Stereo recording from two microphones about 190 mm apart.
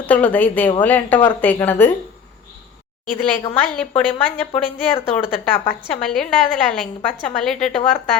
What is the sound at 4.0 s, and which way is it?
Speech, 30° left (ahead or behind).